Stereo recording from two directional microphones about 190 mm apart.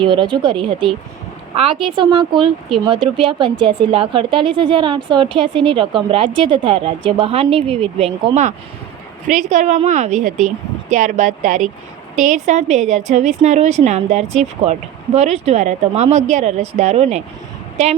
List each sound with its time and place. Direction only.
0.0 s a woman's voice: 25° right (ahead or behind)
2.0 s a woman's voice: 25° right (ahead or behind)